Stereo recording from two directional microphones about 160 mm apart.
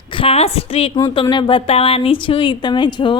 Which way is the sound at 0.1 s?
35° left (ahead or behind).